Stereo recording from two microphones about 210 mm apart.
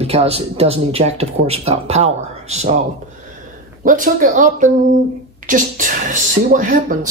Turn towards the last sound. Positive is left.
turn(degrees=-40)  # may be behind; listen again after turning